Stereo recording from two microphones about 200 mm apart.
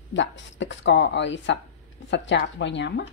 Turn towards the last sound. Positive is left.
turn(degrees=60)  # may be behind; listen again after turning